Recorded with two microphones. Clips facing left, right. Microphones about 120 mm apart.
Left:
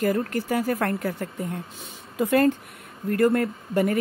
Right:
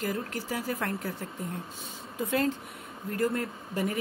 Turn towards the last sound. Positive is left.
turn(degrees=60)  # may be behind; listen again after turning